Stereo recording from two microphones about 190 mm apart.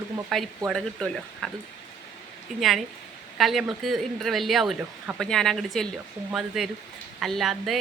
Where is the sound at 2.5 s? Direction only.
Centre (ahead or behind).